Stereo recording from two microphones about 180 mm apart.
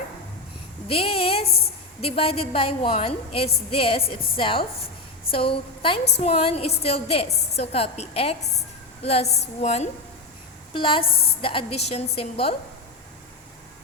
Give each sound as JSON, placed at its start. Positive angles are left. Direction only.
{"t": 0.9, "sound": "a woman's voice", "side_deg": 30}
{"t": 1.5, "sound": "a woman's voice", "side_deg": 60}
{"t": 2.0, "sound": "a woman's voice", "side_deg": 30}